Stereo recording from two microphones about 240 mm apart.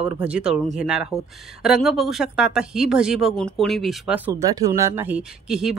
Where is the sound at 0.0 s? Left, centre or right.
Centre.